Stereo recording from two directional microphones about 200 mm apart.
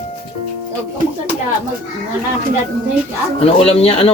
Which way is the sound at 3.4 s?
30° left (ahead or behind).